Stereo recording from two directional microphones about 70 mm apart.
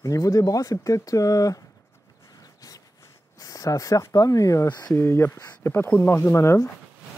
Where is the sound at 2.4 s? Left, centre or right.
Left.